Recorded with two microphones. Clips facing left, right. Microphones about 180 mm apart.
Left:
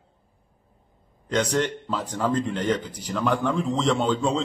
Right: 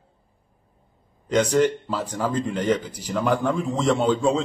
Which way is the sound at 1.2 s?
5° right (ahead or behind).